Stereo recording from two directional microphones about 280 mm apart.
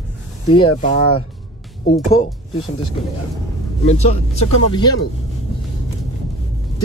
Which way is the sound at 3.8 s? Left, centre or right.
Left.